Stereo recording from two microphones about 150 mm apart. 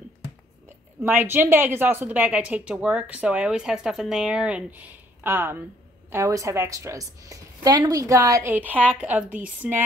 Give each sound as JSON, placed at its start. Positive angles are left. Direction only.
{"t": 1.0, "sound": "a woman's voice", "side_deg": -15}